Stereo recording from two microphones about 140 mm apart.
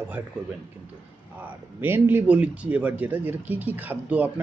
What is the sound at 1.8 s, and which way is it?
Speech, 15° right (ahead or behind).